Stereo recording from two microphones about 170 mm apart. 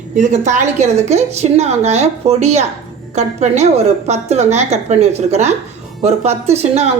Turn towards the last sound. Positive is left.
turn(degrees=-40)  # may be behind; listen again after turning